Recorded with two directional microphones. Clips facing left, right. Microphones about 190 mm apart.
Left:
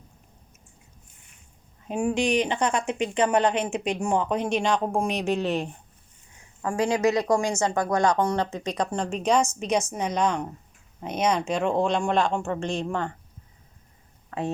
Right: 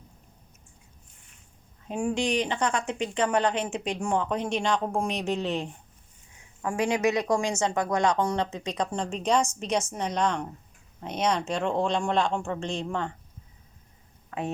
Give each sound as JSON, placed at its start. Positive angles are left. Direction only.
{"t": 1.9, "sound": "speech", "side_deg": 15}
{"t": 6.6, "sound": "speech", "side_deg": -15}
{"t": 7.5, "sound": "speech", "side_deg": -5}